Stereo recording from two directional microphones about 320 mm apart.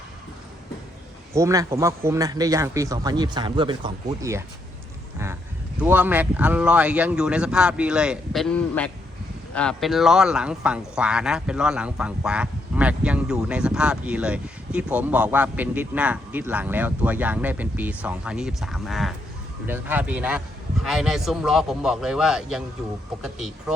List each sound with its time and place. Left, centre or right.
1.3 s speech: centre
5.8 s speech: centre